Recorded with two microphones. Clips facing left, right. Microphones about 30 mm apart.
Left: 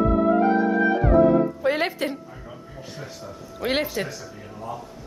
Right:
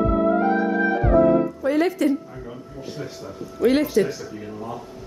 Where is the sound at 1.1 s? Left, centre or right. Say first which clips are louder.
Right 1 dB; right.